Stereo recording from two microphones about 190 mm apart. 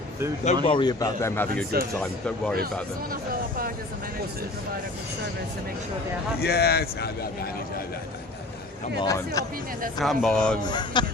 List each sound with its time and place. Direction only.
0.4 s a man's voice: 30° left (ahead or behind)
2.0 s speech: 5° left (ahead or behind)
6.4 s speech: 55° left (ahead or behind)
9.0 s speech: 20° left (ahead or behind)
10.0 s speech: centre (ahead or behind)
10.6 s a man's voice: 20° left (ahead or behind)